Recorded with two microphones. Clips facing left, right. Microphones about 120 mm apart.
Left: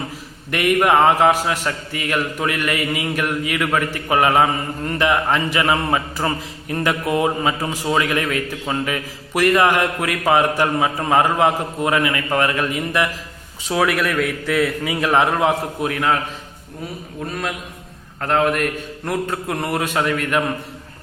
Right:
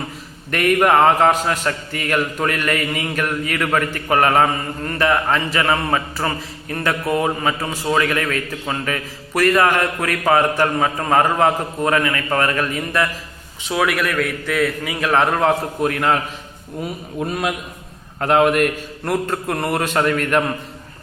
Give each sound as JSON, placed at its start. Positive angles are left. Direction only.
{"t": 0.5, "sound": "a man's voice", "side_deg": 10}
{"t": 13.7, "sound": "a man's voice", "side_deg": 25}
{"t": 17.2, "sound": "a man's voice", "side_deg": -15}